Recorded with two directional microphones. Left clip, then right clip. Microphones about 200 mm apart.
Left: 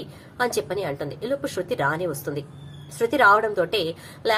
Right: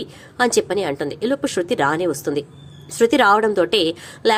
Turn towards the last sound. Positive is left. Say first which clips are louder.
# right 5 dB
turn(degrees=-45)  # may be behind; listen again after turning